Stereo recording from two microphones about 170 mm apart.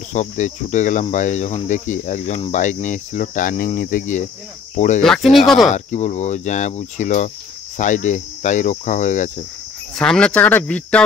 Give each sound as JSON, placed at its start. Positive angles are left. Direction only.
{"t": 0.1, "sound": "speech", "side_deg": 45}
{"t": 5.0, "sound": "speech", "side_deg": 0}
{"t": 5.7, "sound": "speech", "side_deg": 45}
{"t": 9.9, "sound": "speech", "side_deg": 5}